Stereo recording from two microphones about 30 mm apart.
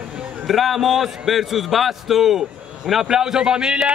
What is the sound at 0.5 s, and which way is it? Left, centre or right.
A man's voice, centre.